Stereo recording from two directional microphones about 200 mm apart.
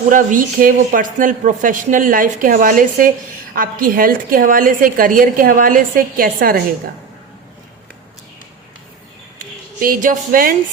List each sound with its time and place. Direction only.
0.1 s a woman's voice: 40° right (ahead or behind)
9.8 s a woman's voice: 45° right (ahead or behind)